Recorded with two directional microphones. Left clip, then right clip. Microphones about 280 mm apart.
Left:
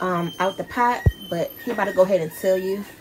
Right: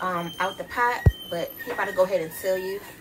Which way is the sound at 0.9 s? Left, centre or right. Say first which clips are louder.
Left 3 dB; centre.